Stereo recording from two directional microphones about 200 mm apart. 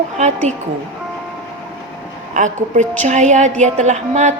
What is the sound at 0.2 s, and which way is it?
Speech, 35° right (ahead or behind).